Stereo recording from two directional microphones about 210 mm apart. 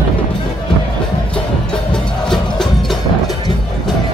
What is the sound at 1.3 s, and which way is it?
Music, 5° left (ahead or behind).